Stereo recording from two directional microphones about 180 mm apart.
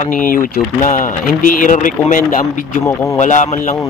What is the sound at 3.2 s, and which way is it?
Speech, 45° left (ahead or behind).